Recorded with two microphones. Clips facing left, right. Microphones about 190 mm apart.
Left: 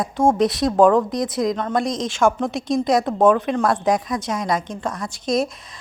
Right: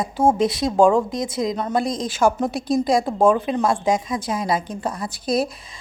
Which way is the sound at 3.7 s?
25° right (ahead or behind).